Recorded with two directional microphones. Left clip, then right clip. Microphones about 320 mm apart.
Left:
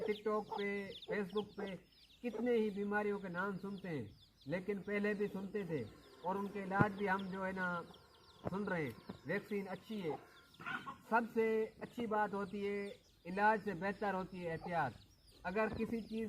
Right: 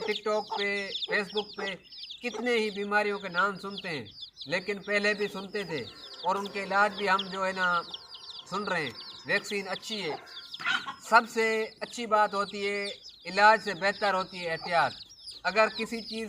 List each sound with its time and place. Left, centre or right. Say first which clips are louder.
0.0 s speech: right 9 dB; centre
2.4 s speech: right 8 dB; centre